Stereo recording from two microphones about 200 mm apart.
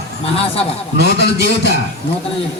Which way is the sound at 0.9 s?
55° left (ahead or behind).